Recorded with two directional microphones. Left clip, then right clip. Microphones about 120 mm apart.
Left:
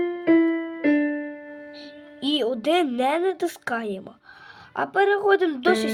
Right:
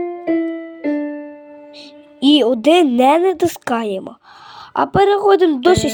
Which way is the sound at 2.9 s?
50° right (ahead or behind).